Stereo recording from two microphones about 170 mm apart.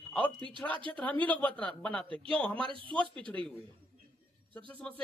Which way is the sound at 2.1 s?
30° right (ahead or behind).